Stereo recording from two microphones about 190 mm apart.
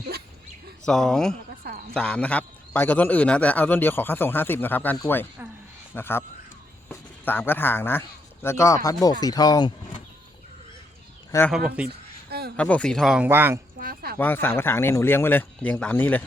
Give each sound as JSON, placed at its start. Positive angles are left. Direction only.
{"t": 0.9, "sound": "a man's voice", "side_deg": 0}
{"t": 11.3, "sound": "speech", "side_deg": 15}
{"t": 11.9, "sound": "a sound", "side_deg": -55}
{"t": 12.5, "sound": "speech", "side_deg": 5}
{"t": 13.7, "sound": "a sound", "side_deg": -50}
{"t": 14.2, "sound": "a man's voice", "side_deg": 10}